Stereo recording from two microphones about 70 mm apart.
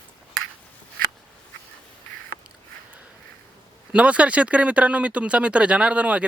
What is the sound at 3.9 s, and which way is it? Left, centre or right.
Speech, centre.